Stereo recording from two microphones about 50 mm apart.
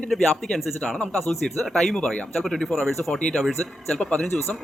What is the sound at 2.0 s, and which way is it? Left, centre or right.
Speech, centre.